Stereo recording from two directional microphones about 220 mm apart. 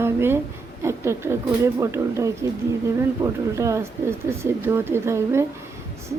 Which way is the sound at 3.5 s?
15° right (ahead or behind).